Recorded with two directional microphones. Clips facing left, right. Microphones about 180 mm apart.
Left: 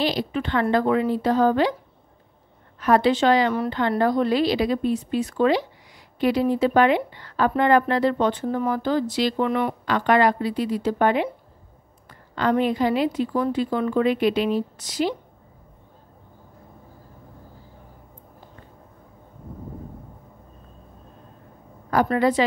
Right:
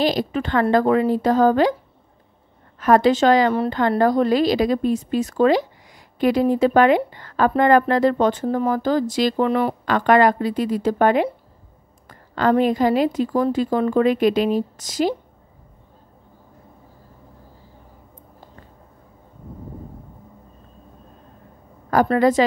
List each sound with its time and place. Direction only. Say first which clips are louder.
0.0 s a woman's voice: right 3 dB; 45° right (ahead or behind)
2.8 s a woman's voice: right 3 dB; 45° right (ahead or behind)
9.8 s a woman's voice: right 3 dB; 50° right (ahead or behind)
21.9 s a woman's voice: right 3 dB; 45° right (ahead or behind)